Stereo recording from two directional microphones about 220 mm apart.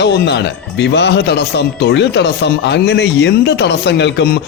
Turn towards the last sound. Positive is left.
turn(degrees=50)  # may be behind; listen again after turning